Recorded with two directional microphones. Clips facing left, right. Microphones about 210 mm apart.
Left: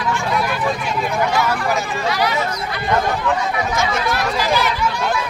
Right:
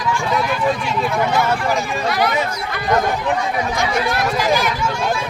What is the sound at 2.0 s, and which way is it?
Speech, 50° right (ahead or behind).